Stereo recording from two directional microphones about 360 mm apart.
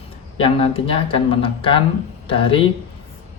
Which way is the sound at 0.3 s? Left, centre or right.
Centre.